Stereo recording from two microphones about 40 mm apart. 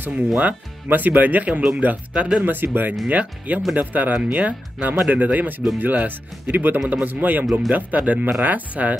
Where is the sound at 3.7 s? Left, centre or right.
Right.